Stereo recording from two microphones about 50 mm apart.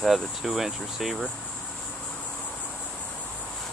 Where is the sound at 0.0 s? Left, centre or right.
Centre.